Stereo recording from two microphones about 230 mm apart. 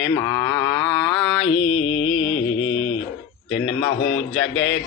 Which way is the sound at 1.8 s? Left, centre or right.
Left.